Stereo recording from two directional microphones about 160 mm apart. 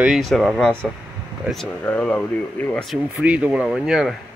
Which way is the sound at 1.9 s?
5° left (ahead or behind).